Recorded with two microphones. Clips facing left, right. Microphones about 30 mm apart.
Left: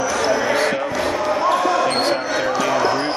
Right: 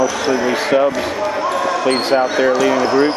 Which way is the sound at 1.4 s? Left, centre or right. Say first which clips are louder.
Left 2 dB; centre.